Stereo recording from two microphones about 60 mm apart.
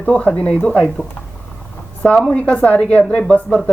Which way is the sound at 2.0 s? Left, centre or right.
Centre.